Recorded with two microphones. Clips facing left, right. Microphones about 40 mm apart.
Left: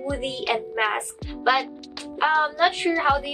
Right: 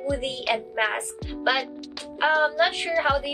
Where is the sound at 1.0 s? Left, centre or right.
Centre.